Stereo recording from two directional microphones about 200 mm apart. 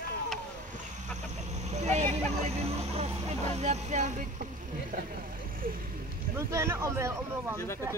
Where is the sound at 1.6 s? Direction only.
35° right (ahead or behind).